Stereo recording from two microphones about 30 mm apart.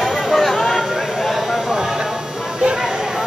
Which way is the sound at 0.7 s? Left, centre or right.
Centre.